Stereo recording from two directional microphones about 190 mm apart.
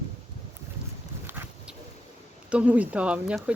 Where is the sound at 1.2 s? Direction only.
10° right (ahead or behind).